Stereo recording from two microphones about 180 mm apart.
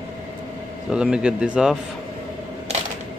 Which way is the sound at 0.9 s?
5° right (ahead or behind).